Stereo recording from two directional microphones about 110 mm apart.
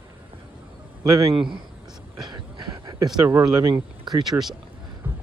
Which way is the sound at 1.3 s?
50° right (ahead or behind).